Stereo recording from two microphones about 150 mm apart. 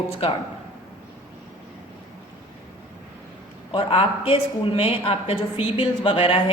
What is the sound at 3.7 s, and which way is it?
Speech, 35° left (ahead or behind).